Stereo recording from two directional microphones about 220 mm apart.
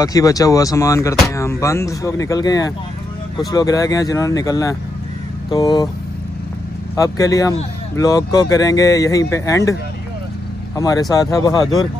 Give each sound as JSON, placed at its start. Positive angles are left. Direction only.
{"t": 0.0, "sound": "speech", "side_deg": 15}
{"t": 7.0, "sound": "speech", "side_deg": 15}
{"t": 10.8, "sound": "speech", "side_deg": 15}